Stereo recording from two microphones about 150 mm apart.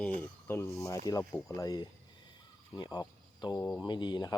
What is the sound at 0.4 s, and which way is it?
Speech, 15° left (ahead or behind).